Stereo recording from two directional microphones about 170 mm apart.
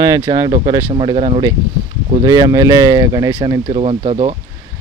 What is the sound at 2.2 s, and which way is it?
Speech, 20° right (ahead or behind).